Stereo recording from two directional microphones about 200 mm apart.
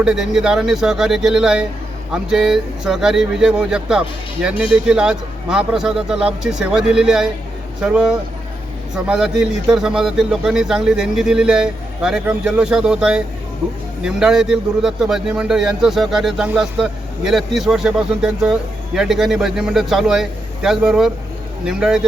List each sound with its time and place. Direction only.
0.0 s speech: centre (ahead or behind)